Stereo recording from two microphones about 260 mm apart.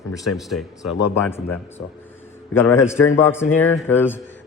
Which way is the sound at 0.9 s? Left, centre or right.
Left.